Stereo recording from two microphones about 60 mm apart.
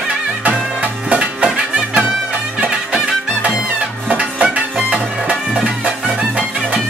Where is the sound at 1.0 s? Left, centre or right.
Centre.